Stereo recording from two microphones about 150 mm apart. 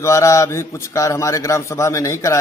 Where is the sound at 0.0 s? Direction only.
20° left (ahead or behind).